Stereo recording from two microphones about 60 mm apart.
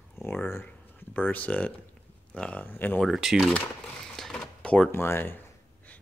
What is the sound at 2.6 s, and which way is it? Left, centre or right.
Speech, left.